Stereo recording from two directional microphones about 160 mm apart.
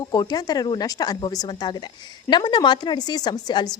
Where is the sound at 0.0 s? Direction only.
25° left (ahead or behind).